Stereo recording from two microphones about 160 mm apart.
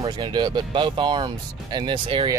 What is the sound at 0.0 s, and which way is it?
Speech, 30° right (ahead or behind).